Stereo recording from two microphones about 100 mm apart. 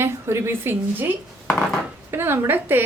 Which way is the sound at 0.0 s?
25° right (ahead or behind).